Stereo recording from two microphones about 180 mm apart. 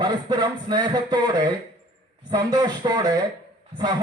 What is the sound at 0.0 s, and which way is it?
A man's voice, 25° right (ahead or behind).